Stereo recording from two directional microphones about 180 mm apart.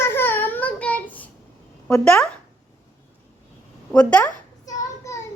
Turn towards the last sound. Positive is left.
turn(degrees=15)  # may be behind; listen again after turning